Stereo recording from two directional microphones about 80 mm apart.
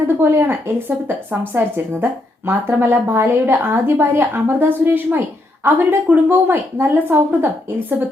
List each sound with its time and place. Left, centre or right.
0.2 s a woman's voice: right